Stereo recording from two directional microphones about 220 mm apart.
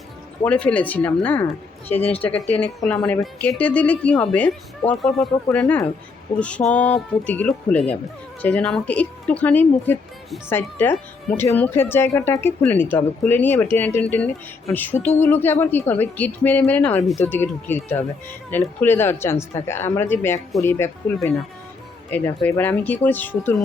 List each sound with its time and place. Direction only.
0.4 s speech: 5° left (ahead or behind)
22.4 s speech: 5° left (ahead or behind)